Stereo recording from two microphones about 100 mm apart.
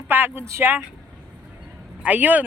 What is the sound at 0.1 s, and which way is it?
Speech, 20° right (ahead or behind).